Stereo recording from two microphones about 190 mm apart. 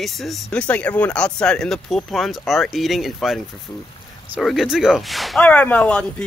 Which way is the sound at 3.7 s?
15° left (ahead or behind).